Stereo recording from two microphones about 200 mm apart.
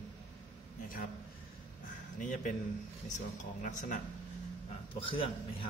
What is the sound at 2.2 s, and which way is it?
Speech, 40° left (ahead or behind).